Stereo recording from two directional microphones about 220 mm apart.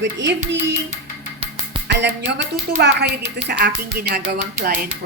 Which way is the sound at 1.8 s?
50° right (ahead or behind).